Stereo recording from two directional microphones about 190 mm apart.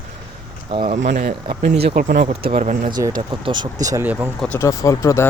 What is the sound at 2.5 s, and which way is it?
Speech, 35° right (ahead or behind).